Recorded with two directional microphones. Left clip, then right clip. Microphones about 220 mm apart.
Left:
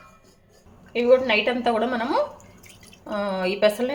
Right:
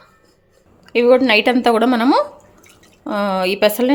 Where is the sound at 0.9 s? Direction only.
50° right (ahead or behind).